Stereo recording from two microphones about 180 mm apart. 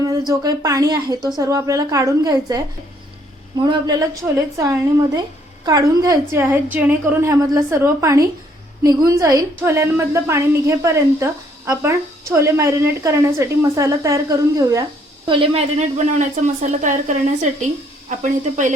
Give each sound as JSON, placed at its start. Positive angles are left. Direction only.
{"t": 0.1, "sound": "a woman's voice", "side_deg": -20}
{"t": 15.3, "sound": "speech", "side_deg": -30}